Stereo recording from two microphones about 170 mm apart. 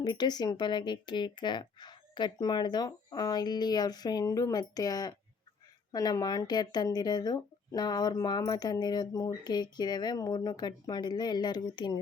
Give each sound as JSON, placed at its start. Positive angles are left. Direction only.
{"t": 0.0, "sound": "speech", "side_deg": 25}